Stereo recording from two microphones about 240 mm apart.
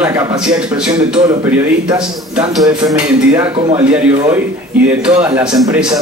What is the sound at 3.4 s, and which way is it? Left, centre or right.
Speech, right.